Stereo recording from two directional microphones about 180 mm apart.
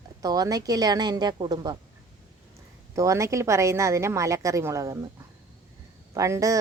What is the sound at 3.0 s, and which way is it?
A woman's voice, 15° right (ahead or behind).